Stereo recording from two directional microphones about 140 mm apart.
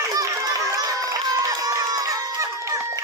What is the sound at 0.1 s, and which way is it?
Run, 25° right (ahead or behind).